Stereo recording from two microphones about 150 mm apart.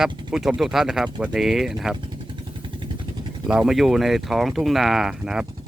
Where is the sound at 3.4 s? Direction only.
5° right (ahead or behind).